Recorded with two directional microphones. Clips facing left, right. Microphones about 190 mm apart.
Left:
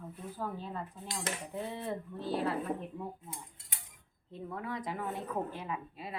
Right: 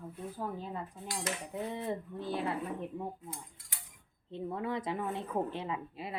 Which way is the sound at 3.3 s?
25° left (ahead or behind).